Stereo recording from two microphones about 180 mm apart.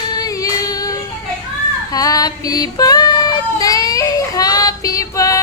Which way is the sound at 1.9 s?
20° left (ahead or behind).